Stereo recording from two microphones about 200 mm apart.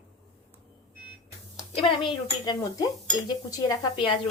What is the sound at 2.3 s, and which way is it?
Speech, 20° left (ahead or behind).